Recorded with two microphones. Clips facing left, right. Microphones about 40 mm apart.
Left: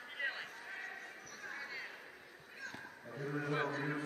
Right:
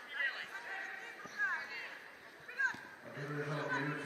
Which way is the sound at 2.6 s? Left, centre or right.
Right.